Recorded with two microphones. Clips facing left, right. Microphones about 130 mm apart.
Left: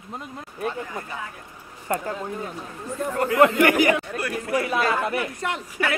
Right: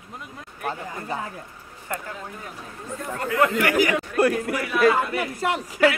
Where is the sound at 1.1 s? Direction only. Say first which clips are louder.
Right 9 dB; 35° right (ahead or behind).